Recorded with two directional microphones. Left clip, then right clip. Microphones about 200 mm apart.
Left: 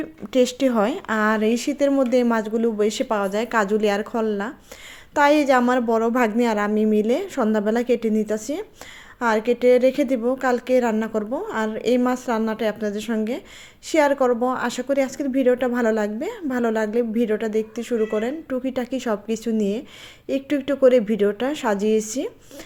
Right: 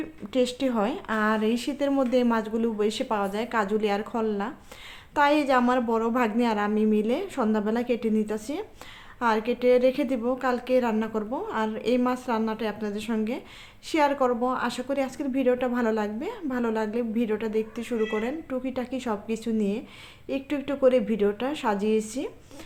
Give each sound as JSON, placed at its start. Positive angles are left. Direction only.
{"t": 0.0, "sound": "a woman's voice", "side_deg": 30}